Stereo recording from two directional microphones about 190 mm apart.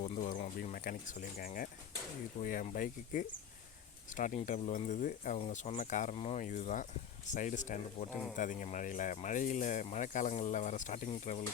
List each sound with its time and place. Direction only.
0.0 s speech: 40° left (ahead or behind)